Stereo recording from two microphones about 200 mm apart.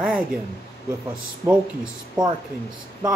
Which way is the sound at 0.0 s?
5° right (ahead or behind).